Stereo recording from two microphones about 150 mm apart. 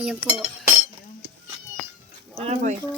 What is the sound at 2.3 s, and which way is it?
Speech, 45° right (ahead or behind).